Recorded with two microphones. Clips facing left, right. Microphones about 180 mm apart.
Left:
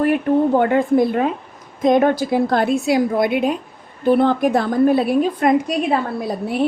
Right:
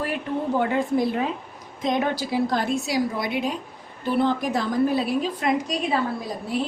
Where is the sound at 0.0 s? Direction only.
55° left (ahead or behind).